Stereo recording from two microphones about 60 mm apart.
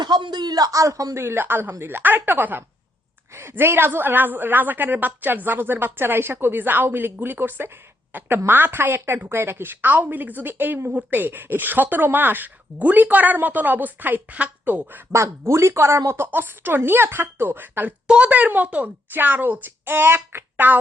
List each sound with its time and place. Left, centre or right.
0.5 s a man's voice: right
1.2 s a woman's voice: right
15.1 s speech: right
16.1 s a woman's voice: right